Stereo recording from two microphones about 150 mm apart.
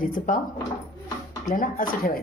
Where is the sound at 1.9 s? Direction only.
75° left (ahead or behind).